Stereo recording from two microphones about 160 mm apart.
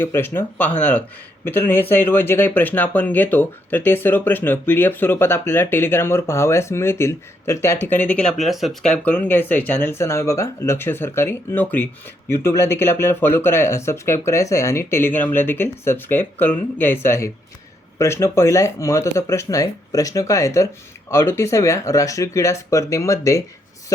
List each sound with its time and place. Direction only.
0.0 s speech: 15° left (ahead or behind)